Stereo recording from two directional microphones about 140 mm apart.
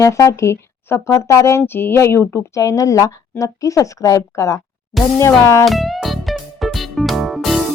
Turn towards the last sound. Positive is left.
turn(degrees=0)  # may be behind; listen again after turning